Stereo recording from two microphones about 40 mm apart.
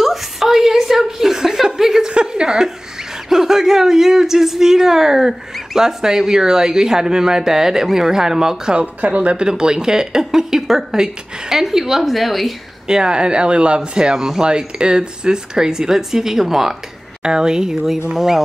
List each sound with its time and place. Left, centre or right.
0.0 s chuckle: centre
2.0 s a sound: right
3.3 s speech: centre
8.7 s speech: right; by 12.5 s centre
12.8 s speech: right
14.1 s speech: centre
14.4 s speech: right
17.2 s speech: centre